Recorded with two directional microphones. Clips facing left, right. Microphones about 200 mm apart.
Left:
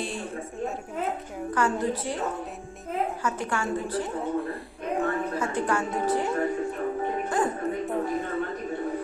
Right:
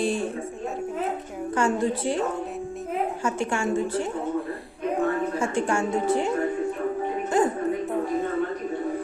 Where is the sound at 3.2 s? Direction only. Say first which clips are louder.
Right 3 dB; 25° right (ahead or behind).